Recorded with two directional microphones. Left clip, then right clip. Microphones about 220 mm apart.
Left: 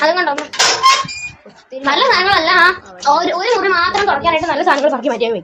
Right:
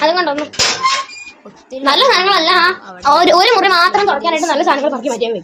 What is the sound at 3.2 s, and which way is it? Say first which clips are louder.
Speech: right 5 dB; 55° right (ahead or behind).